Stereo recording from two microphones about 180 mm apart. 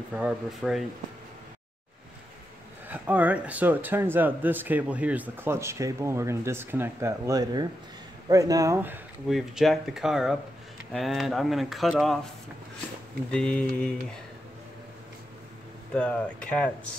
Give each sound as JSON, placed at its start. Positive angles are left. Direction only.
{"t": 0.1, "sound": "speech", "side_deg": -5}
{"t": 2.9, "sound": "speech", "side_deg": -10}
{"t": 9.3, "sound": "speech", "side_deg": 0}
{"t": 13.3, "sound": "speech", "side_deg": 5}
{"t": 15.9, "sound": "speech", "side_deg": 5}